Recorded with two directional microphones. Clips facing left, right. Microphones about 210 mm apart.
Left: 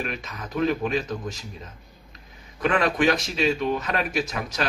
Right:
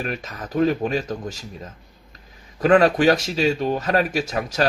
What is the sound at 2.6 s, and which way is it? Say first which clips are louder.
Speech: right 6 dB; 40° right (ahead or behind).